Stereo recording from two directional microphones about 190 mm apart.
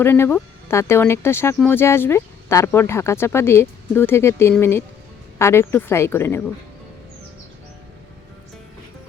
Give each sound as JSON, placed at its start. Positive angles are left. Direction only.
{"t": 0.0, "sound": "speech", "side_deg": 10}